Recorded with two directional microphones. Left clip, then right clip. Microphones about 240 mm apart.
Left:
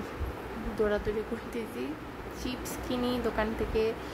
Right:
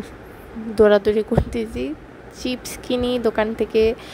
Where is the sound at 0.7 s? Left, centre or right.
Right.